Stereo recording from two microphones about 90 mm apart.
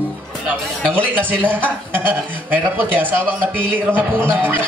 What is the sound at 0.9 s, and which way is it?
A woman's voice, 20° right (ahead or behind).